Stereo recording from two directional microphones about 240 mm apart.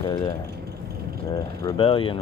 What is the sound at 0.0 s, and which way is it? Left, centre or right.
Vehicle, centre.